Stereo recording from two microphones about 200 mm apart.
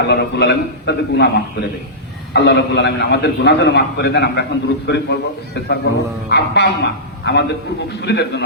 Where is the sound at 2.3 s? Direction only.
60° left (ahead or behind).